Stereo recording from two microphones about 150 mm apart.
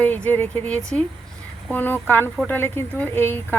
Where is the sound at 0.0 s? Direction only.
10° left (ahead or behind).